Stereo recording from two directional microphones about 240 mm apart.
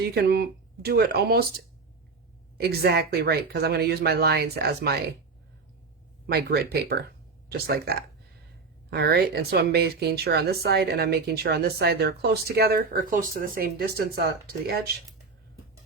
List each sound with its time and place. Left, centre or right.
0.0 s speech: right
2.6 s speech: right
6.2 s speech: right